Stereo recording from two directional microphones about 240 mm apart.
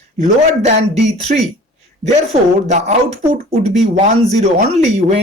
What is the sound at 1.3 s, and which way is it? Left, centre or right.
Speech, right.